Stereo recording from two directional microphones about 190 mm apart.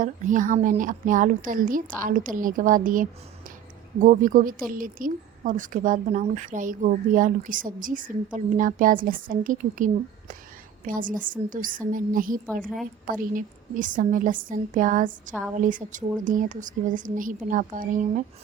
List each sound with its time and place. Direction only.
0.0 s speech: 45° right (ahead or behind)